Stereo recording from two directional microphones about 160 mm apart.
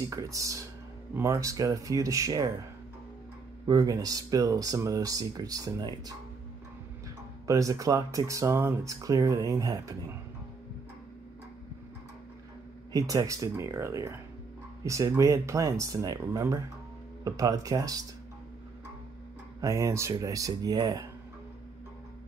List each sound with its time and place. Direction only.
0.1 s speech: 20° right (ahead or behind)
3.6 s speech: 20° right (ahead or behind)
7.4 s speech: 20° right (ahead or behind)
12.9 s speech: 25° right (ahead or behind)
19.6 s speech: 20° right (ahead or behind)